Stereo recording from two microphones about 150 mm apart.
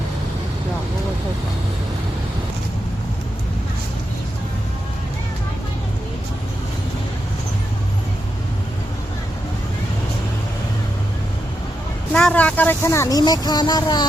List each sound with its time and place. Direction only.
12.1 s speech: 5° left (ahead or behind); by 14.0 s 30° left (ahead or behind)